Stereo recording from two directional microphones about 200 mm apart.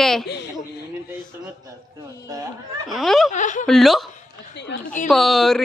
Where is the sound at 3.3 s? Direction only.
40° left (ahead or behind).